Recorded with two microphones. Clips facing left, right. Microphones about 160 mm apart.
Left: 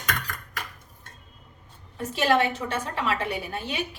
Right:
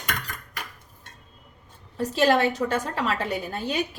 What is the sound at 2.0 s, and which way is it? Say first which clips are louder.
A woman's voice: right 2 dB; 40° right (ahead or behind).